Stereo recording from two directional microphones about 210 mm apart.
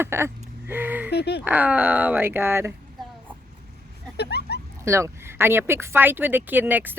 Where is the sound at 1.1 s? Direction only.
50° left (ahead or behind).